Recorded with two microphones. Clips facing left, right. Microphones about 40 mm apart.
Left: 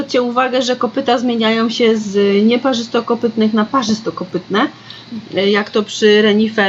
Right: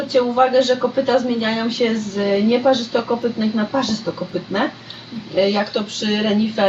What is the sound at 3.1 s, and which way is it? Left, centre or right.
Speech, left.